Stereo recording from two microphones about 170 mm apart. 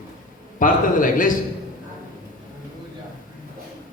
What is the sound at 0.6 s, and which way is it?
Speech, 50° left (ahead or behind).